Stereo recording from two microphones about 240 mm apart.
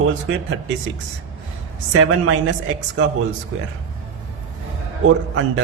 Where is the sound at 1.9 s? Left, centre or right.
Right.